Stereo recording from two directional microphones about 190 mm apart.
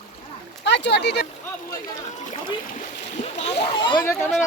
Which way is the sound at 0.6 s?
65° left (ahead or behind).